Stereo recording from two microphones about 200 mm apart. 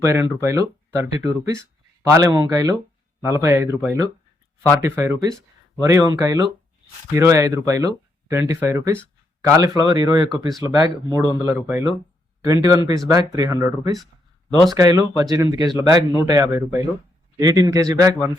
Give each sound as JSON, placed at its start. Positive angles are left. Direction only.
{"t": 0.0, "sound": "speech", "side_deg": -15}